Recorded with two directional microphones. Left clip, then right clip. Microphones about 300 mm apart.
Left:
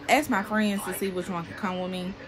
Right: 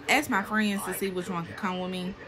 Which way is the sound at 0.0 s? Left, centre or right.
Centre.